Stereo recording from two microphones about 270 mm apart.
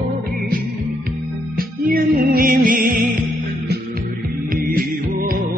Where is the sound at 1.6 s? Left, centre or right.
Right.